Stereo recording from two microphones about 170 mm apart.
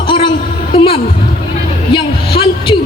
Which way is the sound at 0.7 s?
35° left (ahead or behind).